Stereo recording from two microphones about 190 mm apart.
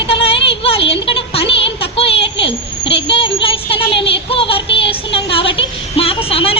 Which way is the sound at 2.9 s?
30° left (ahead or behind).